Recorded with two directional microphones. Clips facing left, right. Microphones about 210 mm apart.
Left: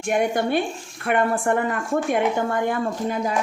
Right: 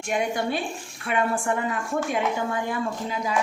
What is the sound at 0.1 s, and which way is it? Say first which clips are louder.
A woman's voice: left 5 dB; 55° left (ahead or behind).